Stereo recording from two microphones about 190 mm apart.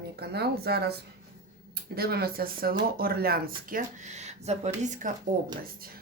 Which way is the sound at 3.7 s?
40° right (ahead or behind).